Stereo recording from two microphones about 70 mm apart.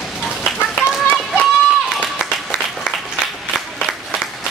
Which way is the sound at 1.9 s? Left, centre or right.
Centre.